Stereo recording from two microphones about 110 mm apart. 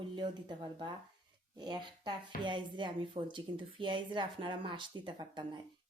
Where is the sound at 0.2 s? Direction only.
45° right (ahead or behind).